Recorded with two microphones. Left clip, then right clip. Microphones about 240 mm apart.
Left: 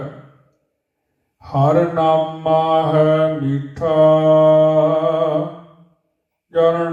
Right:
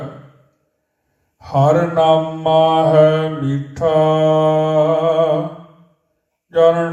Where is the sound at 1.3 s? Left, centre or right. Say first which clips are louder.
Right 1 dB; right.